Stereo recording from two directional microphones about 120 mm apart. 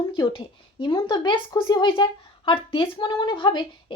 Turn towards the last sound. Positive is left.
turn(degrees=40)  # may be behind; listen again after turning